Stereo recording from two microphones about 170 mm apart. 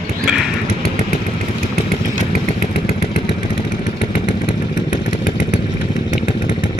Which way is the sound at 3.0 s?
40° left (ahead or behind).